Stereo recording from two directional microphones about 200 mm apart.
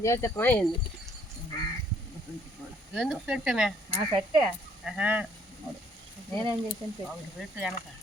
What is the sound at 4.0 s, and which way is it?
Speech, 20° right (ahead or behind).